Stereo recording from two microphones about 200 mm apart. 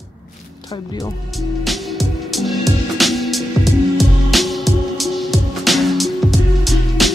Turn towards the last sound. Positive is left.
turn(degrees=0)  # may be behind; listen again after turning